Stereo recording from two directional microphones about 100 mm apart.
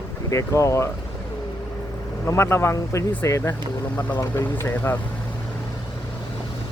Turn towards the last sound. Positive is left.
turn(degrees=25)  # may be behind; listen again after turning